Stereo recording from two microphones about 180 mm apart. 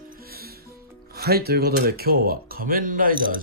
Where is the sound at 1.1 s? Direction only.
60° right (ahead or behind).